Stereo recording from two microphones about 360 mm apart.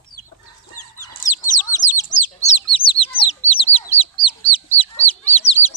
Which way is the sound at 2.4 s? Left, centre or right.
Centre.